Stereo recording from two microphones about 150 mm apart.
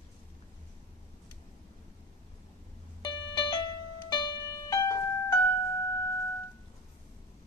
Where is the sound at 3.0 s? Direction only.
30° left (ahead or behind).